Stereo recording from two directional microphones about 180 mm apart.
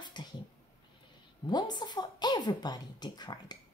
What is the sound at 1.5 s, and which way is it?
A woman's voice, 25° left (ahead or behind).